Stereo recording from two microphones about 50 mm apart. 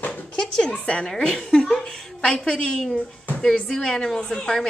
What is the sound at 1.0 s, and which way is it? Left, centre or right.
A woman's voice, centre.